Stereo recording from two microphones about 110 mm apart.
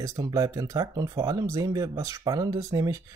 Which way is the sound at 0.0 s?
30° right (ahead or behind).